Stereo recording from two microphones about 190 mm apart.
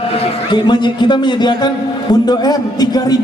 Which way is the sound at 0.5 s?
25° left (ahead or behind).